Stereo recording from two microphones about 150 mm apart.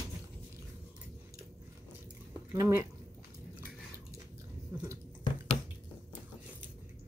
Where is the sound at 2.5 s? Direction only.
20° right (ahead or behind).